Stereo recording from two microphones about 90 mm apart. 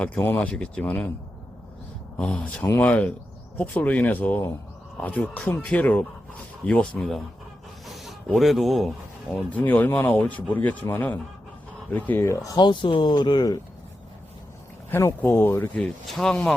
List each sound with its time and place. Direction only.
0.3 s speech: 10° left (ahead or behind)
2.1 s speech: 10° left (ahead or behind)
7.9 s speech: centre (ahead or behind)
9.5 s speech: 20° left (ahead or behind)
12.2 s speech: 30° left (ahead or behind)
12.5 s speech: 60° left (ahead or behind)
14.8 s speech: 25° left (ahead or behind)
15.7 s speech: 5° left (ahead or behind)